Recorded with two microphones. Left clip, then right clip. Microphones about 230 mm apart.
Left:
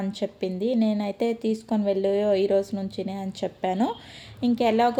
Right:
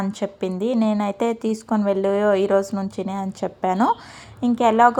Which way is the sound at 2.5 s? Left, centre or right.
Centre.